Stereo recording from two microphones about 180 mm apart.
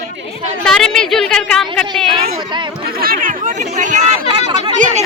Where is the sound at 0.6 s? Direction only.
5° left (ahead or behind).